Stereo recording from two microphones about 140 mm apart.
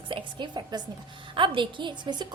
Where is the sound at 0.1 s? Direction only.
35° right (ahead or behind).